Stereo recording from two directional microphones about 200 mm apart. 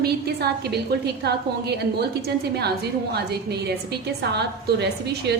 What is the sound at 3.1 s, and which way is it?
A woman's voice, 55° right (ahead or behind).